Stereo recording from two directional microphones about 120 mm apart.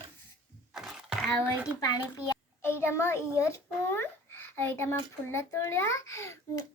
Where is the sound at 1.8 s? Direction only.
30° left (ahead or behind).